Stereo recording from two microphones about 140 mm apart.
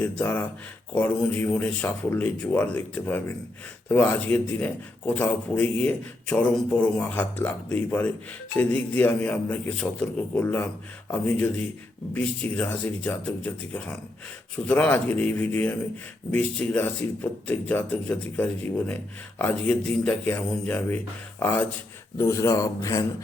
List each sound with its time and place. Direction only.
0.0 s a man's voice: 10° left (ahead or behind)